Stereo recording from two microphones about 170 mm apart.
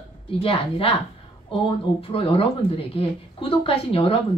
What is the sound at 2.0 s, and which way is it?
A woman's voice, 35° left (ahead or behind).